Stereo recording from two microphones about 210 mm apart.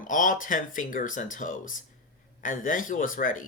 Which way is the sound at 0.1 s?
40° left (ahead or behind).